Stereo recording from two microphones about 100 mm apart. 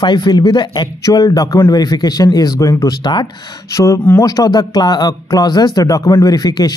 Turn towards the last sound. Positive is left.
turn(degrees=40)  # may be behind; listen again after turning